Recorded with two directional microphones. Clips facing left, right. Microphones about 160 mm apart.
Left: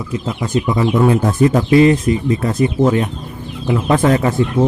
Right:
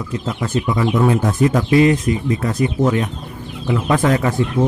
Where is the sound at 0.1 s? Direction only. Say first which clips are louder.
Left 3 dB; 15° left (ahead or behind).